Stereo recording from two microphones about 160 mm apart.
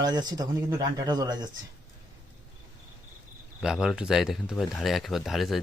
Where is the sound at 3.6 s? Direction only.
5° right (ahead or behind).